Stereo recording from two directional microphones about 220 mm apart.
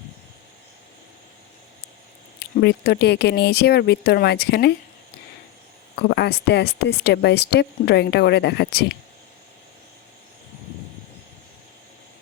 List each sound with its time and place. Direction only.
2.4 s speech: 50° left (ahead or behind)
6.0 s speech: 50° left (ahead or behind)